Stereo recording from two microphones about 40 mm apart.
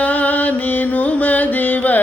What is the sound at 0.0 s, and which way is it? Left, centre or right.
Music, left.